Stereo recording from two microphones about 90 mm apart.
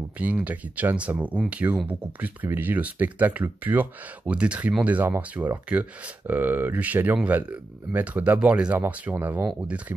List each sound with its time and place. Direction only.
0.2 s speech: 15° right (ahead or behind)